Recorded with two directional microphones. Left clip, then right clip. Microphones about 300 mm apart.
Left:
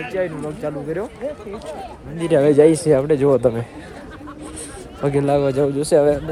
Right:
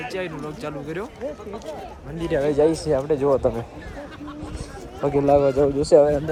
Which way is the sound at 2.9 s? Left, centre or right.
Left.